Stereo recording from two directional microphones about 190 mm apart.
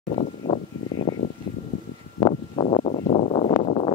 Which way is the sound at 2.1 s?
30° left (ahead or behind).